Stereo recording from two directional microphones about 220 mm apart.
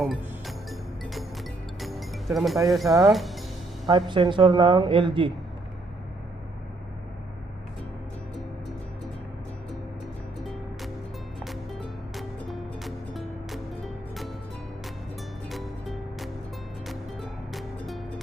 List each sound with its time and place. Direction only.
0.0 s music: centre (ahead or behind)
3.1 s speech: centre (ahead or behind)
3.8 s speech: 20° right (ahead or behind)
11.4 s music: centre (ahead or behind)
15.4 s music: centre (ahead or behind)